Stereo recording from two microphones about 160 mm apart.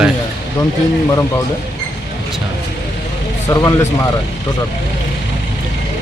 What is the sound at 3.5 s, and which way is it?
Speech, 20° left (ahead or behind).